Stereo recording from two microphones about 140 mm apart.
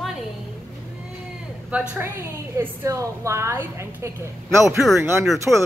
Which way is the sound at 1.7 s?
10° right (ahead or behind).